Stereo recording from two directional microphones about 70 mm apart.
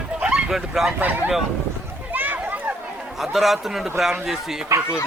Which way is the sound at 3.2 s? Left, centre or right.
Centre.